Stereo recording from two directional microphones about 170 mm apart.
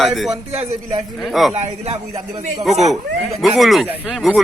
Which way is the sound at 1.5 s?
40° right (ahead or behind).